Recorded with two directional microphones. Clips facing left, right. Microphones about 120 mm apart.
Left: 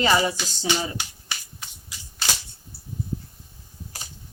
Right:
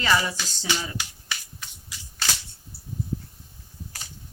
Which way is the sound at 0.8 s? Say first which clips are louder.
Left 2 dB; 25° left (ahead or behind).